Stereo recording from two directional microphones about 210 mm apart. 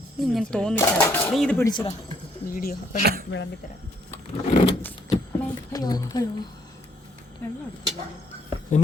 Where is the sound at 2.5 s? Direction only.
40° left (ahead or behind).